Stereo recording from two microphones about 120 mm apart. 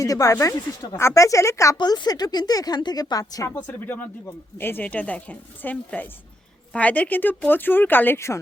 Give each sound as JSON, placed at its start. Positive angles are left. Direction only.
{"t": 0.0, "sound": "speech", "side_deg": 30}
{"t": 1.8, "sound": "a woman's voice", "side_deg": 35}
{"t": 3.7, "sound": "speech", "side_deg": 15}